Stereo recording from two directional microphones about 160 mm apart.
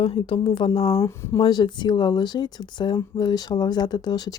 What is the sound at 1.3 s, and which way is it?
Speech, 30° left (ahead or behind).